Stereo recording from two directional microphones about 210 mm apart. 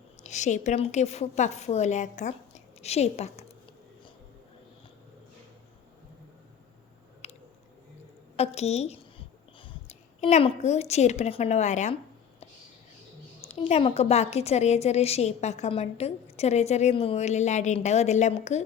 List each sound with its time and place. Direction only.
0.2 s a woman's voice: 35° left (ahead or behind)
7.2 s a sound: 30° left (ahead or behind)
8.4 s a woman's voice: 30° left (ahead or behind)
13.4 s a woman's voice: 30° left (ahead or behind)